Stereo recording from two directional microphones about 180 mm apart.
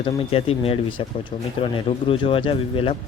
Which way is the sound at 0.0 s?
35° left (ahead or behind).